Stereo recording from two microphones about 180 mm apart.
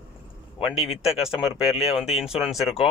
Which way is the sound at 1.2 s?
5° right (ahead or behind).